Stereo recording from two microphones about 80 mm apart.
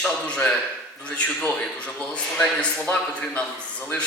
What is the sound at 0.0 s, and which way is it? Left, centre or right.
A man's voice, centre.